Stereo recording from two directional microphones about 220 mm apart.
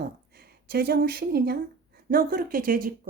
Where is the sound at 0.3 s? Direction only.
45° right (ahead or behind).